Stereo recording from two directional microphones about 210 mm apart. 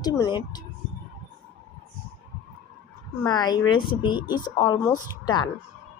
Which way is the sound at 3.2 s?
20° left (ahead or behind).